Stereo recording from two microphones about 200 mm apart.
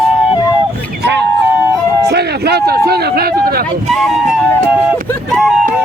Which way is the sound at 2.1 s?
55° right (ahead or behind).